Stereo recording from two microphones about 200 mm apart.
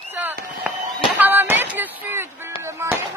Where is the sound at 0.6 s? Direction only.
5° right (ahead or behind).